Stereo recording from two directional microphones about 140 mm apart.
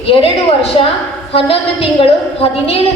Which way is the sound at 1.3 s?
40° left (ahead or behind).